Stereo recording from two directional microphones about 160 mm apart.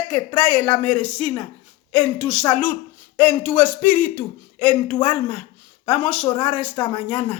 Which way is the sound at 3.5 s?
10° left (ahead or behind).